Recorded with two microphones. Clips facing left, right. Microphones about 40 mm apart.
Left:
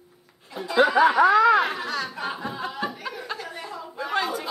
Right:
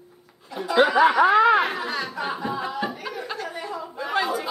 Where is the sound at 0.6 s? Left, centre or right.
Right.